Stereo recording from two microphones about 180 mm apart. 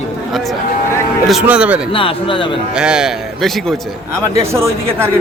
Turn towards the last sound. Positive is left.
turn(degrees=-15)  # may be behind; listen again after turning